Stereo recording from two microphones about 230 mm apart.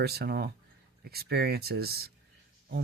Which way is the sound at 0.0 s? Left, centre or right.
Right.